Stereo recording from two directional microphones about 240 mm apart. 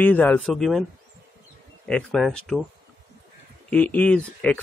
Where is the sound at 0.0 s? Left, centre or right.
Centre.